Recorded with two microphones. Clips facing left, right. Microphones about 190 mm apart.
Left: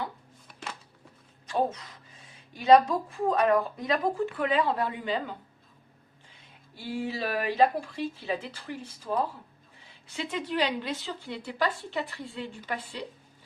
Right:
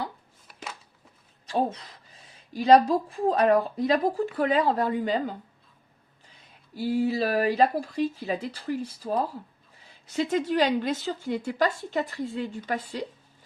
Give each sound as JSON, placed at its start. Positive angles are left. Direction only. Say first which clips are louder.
{"t": 0.4, "sound": "a sound", "louder": "even", "side_deg": 0}
{"t": 1.5, "sound": "speech", "louder": "right 1 dB", "side_deg": -30}
{"t": 6.7, "sound": "a woman's voice", "louder": "right 8 dB", "side_deg": -40}